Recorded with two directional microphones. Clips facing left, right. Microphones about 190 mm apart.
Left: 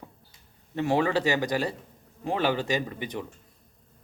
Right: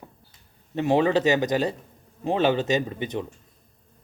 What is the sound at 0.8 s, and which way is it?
Speech, 20° right (ahead or behind).